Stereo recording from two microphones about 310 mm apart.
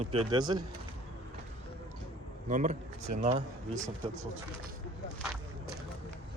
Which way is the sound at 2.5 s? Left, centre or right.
Right.